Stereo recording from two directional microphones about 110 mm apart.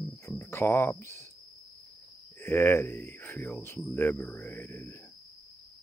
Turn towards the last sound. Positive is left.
turn(degrees=20)  # may be behind; listen again after turning